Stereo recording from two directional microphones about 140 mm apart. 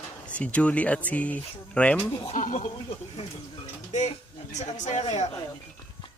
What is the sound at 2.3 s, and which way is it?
Speech, 75° left (ahead or behind).